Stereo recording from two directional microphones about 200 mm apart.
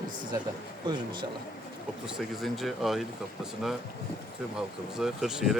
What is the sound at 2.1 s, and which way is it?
Speech, centre (ahead or behind).